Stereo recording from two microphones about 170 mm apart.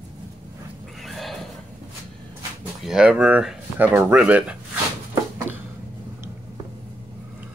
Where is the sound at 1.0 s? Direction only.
Centre (ahead or behind).